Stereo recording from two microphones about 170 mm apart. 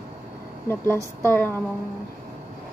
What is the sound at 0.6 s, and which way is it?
Speech, 10° left (ahead or behind).